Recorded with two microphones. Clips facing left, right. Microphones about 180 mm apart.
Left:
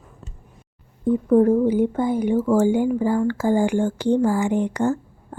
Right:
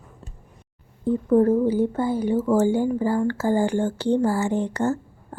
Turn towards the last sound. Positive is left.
turn(degrees=15)  # may be behind; listen again after turning